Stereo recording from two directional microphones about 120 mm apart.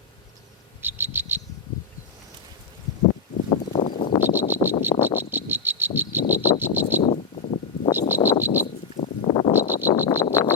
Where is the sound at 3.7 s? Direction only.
45° left (ahead or behind).